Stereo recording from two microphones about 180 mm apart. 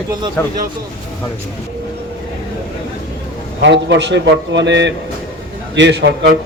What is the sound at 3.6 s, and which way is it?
A man's voice, 75° right (ahead or behind).